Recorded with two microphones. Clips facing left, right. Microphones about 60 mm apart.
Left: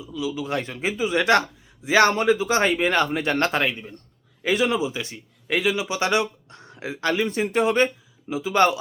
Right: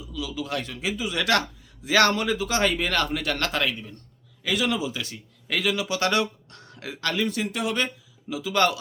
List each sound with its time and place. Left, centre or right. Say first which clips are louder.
0.0 s a man's voice: left 4 dB; left